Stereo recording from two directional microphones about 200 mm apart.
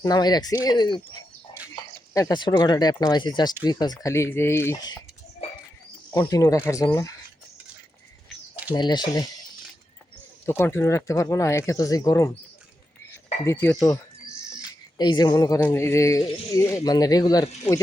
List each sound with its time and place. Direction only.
0.0 s speech: 20° left (ahead or behind)
6.1 s speech: 15° left (ahead or behind)
8.7 s speech: 20° left (ahead or behind)
10.4 s speech: 10° left (ahead or behind)
13.4 s speech: 10° left (ahead or behind)